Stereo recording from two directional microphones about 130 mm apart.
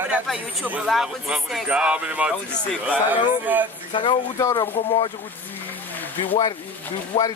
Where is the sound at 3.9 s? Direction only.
40° left (ahead or behind).